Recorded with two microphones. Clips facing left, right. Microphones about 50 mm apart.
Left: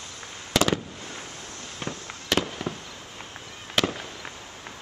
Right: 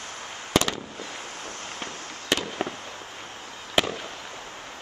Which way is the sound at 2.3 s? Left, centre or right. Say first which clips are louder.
Left 1 dB; centre.